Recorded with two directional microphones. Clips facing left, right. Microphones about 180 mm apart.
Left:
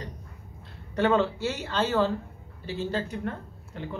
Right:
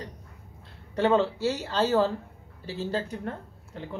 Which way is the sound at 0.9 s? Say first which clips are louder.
Even; 30° right (ahead or behind).